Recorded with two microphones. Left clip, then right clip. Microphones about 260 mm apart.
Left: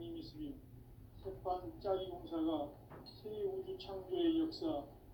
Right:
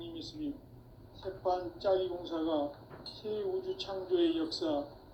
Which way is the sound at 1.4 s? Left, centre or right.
Right.